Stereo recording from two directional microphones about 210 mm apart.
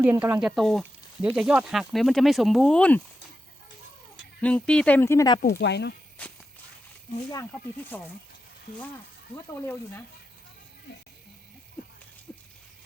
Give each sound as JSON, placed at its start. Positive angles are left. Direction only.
{"t": 0.0, "sound": "speech", "side_deg": -10}
{"t": 4.4, "sound": "speech", "side_deg": 5}
{"t": 5.4, "sound": "speech", "side_deg": 50}
{"t": 6.2, "sound": "walk", "side_deg": 5}
{"t": 7.3, "sound": "speech", "side_deg": 10}
{"t": 12.3, "sound": "a sound", "side_deg": 5}